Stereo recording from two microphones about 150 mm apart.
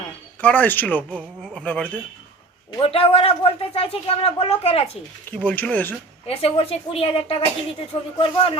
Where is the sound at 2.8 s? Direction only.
40° left (ahead or behind).